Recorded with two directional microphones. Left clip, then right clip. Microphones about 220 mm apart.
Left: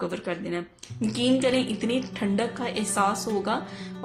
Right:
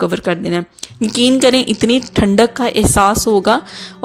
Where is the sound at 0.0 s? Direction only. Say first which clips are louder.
Right 14 dB; 40° right (ahead or behind).